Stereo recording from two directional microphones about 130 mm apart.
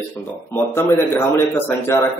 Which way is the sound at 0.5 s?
15° left (ahead or behind).